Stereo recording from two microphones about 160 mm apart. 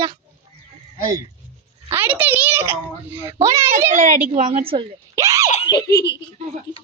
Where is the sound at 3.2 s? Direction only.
20° right (ahead or behind).